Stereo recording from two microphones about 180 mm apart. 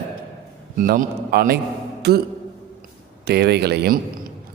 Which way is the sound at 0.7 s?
55° right (ahead or behind).